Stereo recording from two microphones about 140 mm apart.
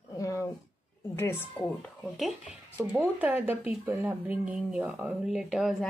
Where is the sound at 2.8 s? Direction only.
15° right (ahead or behind).